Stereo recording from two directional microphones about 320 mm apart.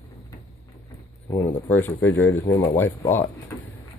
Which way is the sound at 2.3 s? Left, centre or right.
Centre.